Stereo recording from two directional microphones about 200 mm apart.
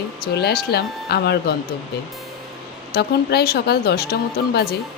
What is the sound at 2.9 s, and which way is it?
Speech, 50° left (ahead or behind).